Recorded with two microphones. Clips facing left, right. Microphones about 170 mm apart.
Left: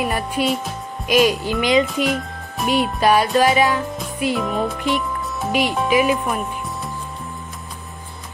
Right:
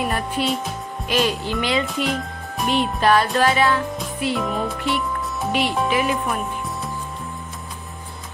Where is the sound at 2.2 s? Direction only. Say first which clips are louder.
Left 1 dB; 5° left (ahead or behind).